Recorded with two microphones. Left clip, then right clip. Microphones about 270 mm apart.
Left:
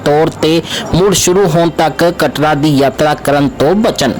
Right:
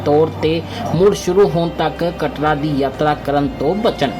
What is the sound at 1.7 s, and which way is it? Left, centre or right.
A woman's voice, left.